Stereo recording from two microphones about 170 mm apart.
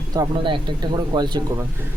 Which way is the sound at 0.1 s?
25° right (ahead or behind).